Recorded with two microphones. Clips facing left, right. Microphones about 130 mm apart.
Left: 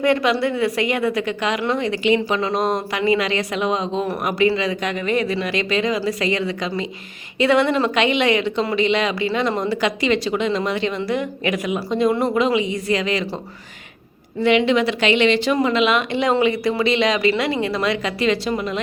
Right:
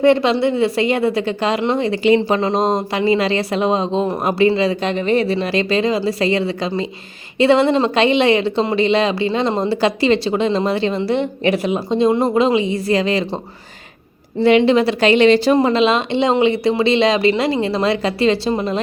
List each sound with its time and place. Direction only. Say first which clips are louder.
0.0 s a woman's voice: right 4 dB; 30° right (ahead or behind)
14.4 s a woman's voice: right 4 dB; 35° right (ahead or behind)